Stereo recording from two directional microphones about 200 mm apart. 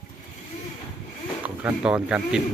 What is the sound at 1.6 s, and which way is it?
Speech, 5° right (ahead or behind).